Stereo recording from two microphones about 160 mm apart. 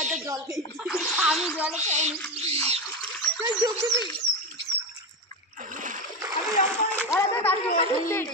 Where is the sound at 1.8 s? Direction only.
45° right (ahead or behind).